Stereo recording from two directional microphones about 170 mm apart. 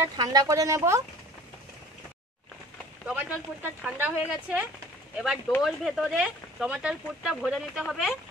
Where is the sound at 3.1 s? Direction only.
10° right (ahead or behind).